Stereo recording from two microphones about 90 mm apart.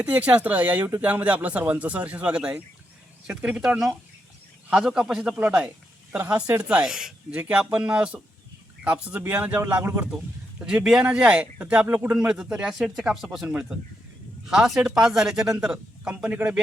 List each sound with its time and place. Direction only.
0.0 s a man's voice: 15° right (ahead or behind)
6.6 s speech: 15° right (ahead or behind)
10.6 s speech: 10° right (ahead or behind)